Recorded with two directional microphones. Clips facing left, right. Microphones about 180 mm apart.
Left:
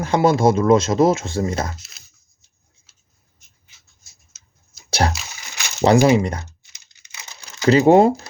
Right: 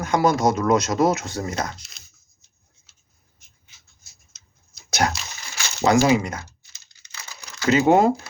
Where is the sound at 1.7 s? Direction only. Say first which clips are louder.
Left 4 dB; 5° left (ahead or behind).